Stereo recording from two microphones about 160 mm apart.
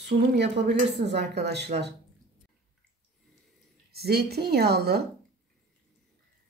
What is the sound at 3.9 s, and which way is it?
Speech, 85° right.